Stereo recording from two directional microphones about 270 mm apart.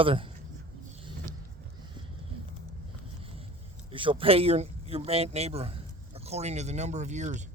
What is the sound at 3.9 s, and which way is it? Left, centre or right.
Speech, centre.